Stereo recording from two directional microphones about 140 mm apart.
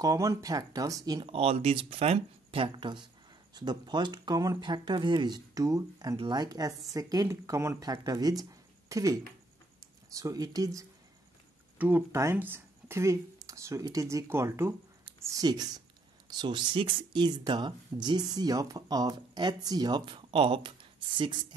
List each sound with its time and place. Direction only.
0.0 s speech: 25° right (ahead or behind)
1.2 s speech: 45° right (ahead or behind); by 9.1 s 25° right (ahead or behind)
10.1 s speech: 25° right (ahead or behind)